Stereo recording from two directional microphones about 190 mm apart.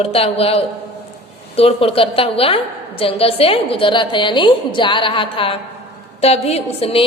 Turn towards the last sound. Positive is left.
turn(degrees=30)  # may be behind; listen again after turning